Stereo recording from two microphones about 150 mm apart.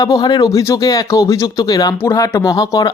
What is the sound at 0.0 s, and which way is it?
Speech, 25° left (ahead or behind).